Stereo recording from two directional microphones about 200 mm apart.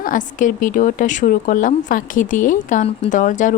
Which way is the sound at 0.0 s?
40° left (ahead or behind).